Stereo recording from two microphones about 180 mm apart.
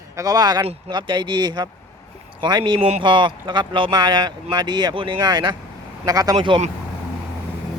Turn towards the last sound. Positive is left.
turn(degrees=-25)  # may be behind; listen again after turning